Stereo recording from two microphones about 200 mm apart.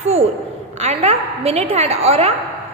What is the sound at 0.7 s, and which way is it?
A woman's voice, 35° right (ahead or behind).